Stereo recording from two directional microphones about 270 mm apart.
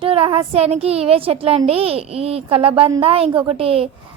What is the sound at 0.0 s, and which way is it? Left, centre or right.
A child's voice, right.